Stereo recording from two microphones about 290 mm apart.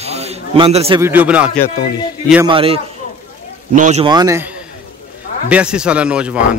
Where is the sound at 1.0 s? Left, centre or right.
Centre.